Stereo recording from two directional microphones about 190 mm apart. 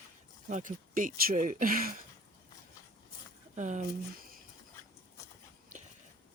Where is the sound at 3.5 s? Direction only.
40° right (ahead or behind).